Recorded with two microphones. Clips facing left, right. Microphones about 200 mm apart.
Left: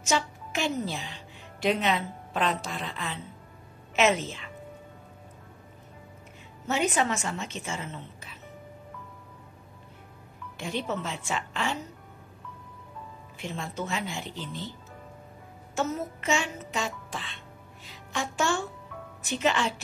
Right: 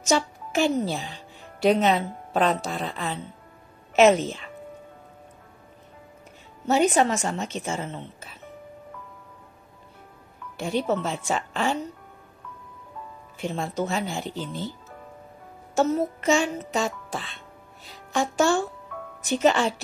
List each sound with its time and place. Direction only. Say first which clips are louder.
0.0 s a woman's voice: right 5 dB; 40° right (ahead or behind)
6.7 s a woman's voice: right 6 dB; 40° right (ahead or behind)
10.6 s a woman's voice: right 7 dB; 40° right (ahead or behind)
13.4 s a woman's voice: right 7 dB; 40° right (ahead or behind)
15.7 s a woman's voice: right 8 dB; 35° right (ahead or behind)
18.9 s music: right 5 dB; 50° right (ahead or behind)
19.2 s a woman's voice: right 6 dB; 40° right (ahead or behind)